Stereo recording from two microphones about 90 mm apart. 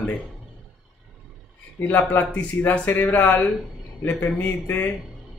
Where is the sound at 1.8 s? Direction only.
20° left (ahead or behind).